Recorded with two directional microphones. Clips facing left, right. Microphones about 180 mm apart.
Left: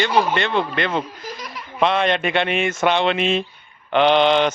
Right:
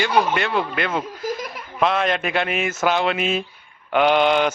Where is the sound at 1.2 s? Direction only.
50° right (ahead or behind).